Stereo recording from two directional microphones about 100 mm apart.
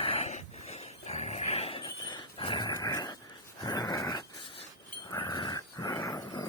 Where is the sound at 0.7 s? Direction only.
90° left; by 1.9 s 70° left (ahead or behind).